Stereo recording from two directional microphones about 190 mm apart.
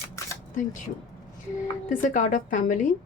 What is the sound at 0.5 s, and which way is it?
Speech, 45° left (ahead or behind).